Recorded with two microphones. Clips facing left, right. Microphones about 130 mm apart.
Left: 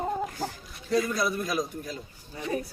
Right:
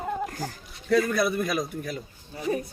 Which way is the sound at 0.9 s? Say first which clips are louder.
Right 3 dB; 60° right (ahead or behind).